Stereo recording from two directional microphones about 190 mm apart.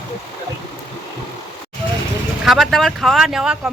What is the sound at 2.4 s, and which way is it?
Speech, centre (ahead or behind).